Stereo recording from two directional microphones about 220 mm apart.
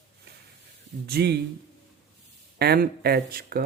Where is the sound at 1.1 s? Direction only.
45° right (ahead or behind).